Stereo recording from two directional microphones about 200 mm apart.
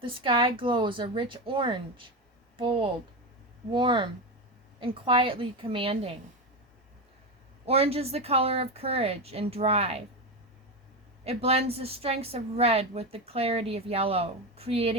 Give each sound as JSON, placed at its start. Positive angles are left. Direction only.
{"t": 0.0, "sound": "a woman's voice", "side_deg": -25}
{"t": 7.7, "sound": "a woman's voice", "side_deg": -30}
{"t": 11.2, "sound": "a woman's voice", "side_deg": -30}